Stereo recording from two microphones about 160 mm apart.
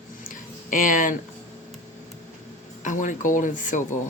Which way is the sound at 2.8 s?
55° left (ahead or behind).